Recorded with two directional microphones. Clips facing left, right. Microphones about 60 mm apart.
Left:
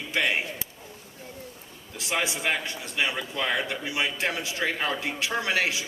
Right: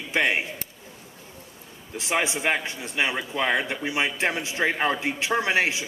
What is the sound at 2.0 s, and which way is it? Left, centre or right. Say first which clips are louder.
A man's voice: right 3 dB; right.